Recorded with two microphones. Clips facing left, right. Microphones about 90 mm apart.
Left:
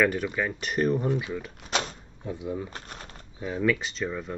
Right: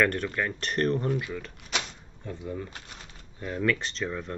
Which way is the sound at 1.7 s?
40° left (ahead or behind).